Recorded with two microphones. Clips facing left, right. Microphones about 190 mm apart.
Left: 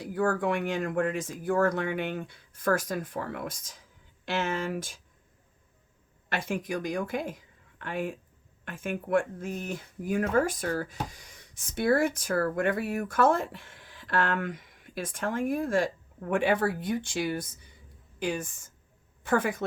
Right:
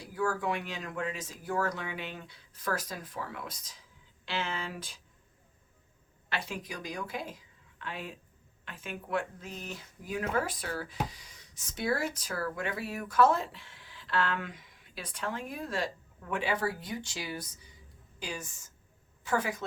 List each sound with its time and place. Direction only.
0.0 s speech: 55° left (ahead or behind)
6.2 s a woman's voice: 50° left (ahead or behind)